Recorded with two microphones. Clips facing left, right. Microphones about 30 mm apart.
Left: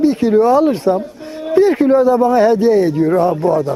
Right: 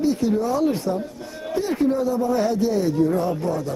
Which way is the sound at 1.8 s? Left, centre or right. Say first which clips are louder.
Left 10 dB; left.